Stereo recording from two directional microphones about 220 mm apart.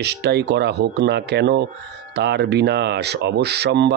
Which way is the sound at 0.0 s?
50° right (ahead or behind).